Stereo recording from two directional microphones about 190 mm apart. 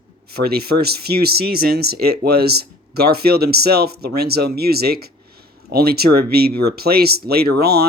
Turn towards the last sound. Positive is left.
turn(degrees=-55)  # may be behind; listen again after turning